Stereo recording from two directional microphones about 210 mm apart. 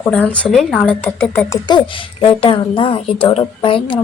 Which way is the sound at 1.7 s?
25° left (ahead or behind).